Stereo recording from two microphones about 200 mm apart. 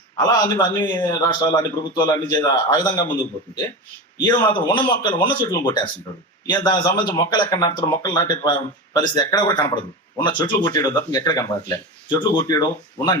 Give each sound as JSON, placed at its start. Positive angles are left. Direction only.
{"t": 0.2, "sound": "speech", "side_deg": 20}
{"t": 4.2, "sound": "speech", "side_deg": 25}
{"t": 6.1, "sound": "speech", "side_deg": 15}